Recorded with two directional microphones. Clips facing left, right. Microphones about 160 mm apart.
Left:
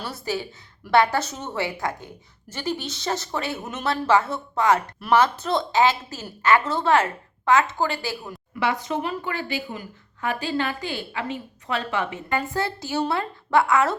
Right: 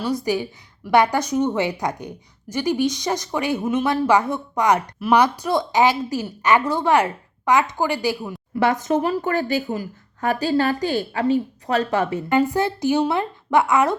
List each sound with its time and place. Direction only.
0.3 s a woman's voice: 15° right (ahead or behind)
8.5 s speech: 45° right (ahead or behind)
12.3 s speech: 20° right (ahead or behind)